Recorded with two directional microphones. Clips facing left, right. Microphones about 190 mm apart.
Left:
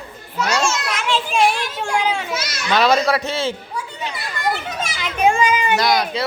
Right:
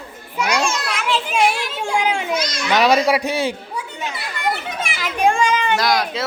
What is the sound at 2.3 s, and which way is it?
Speech, 5° left (ahead or behind).